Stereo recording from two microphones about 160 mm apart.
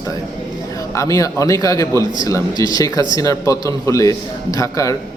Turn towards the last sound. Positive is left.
turn(degrees=20)  # may be behind; listen again after turning